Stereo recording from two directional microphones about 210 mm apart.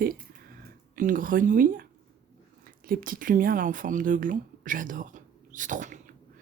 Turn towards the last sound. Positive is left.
turn(degrees=-35)  # may be behind; listen again after turning